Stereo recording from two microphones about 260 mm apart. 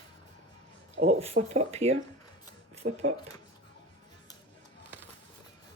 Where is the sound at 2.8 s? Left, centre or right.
Right.